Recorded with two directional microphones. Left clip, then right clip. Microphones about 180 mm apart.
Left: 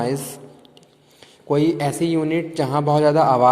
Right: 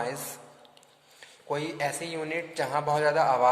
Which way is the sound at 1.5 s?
25° left (ahead or behind).